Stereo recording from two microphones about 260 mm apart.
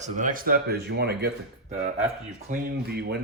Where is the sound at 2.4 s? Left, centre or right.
Right.